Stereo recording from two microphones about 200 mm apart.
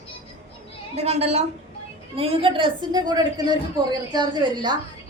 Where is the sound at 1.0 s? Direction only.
30° right (ahead or behind).